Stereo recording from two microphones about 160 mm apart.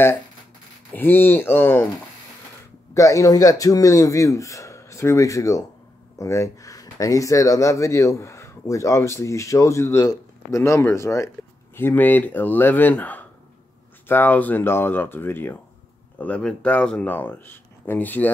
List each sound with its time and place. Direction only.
0.9 s speech: 15° left (ahead or behind)
2.9 s speech: 20° left (ahead or behind)